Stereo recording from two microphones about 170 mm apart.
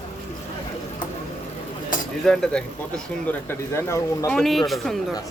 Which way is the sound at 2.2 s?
5° left (ahead or behind).